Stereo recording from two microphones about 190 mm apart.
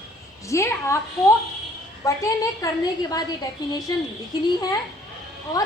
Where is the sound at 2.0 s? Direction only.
15° left (ahead or behind).